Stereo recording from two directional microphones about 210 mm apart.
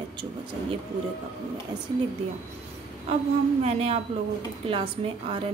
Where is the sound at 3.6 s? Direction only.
30° right (ahead or behind).